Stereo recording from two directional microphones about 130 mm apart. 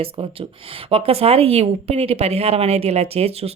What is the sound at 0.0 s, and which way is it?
Speech, 45° right (ahead or behind).